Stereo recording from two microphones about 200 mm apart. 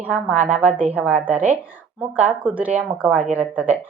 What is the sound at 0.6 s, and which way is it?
Speech, 5° right (ahead or behind).